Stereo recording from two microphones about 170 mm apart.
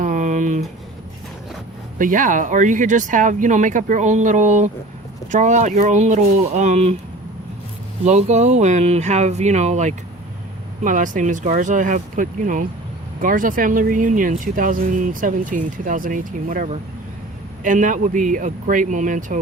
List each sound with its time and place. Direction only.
0.0 s a sound: 45° right (ahead or behind)
2.0 s speech: 50° right (ahead or behind)
8.0 s speech: 40° right (ahead or behind)